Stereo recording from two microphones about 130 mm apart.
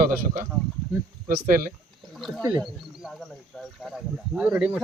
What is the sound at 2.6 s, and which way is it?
Speech, 5° right (ahead or behind).